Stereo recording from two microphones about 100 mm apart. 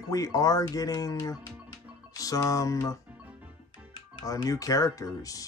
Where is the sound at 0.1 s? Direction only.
35° left (ahead or behind).